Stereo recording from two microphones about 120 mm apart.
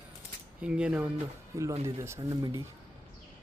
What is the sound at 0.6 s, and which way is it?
Speech, 10° right (ahead or behind).